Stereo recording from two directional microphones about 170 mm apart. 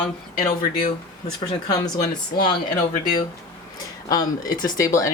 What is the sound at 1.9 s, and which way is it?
Speech, 25° left (ahead or behind).